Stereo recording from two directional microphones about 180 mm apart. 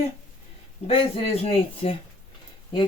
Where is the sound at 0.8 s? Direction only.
35° left (ahead or behind).